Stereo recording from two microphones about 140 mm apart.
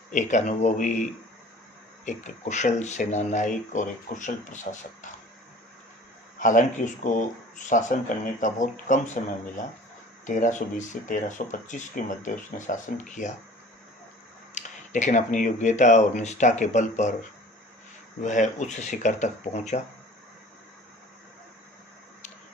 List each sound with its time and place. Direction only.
0.1 s speech: 60° left (ahead or behind)
2.0 s speech: 60° left (ahead or behind)
6.4 s speech: 65° left (ahead or behind)
10.2 s speech: 65° left (ahead or behind)
14.5 s speech: 60° left (ahead or behind)
18.2 s speech: 60° left (ahead or behind)